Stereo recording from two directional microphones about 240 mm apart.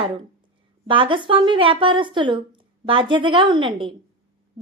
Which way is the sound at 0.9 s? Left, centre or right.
Right.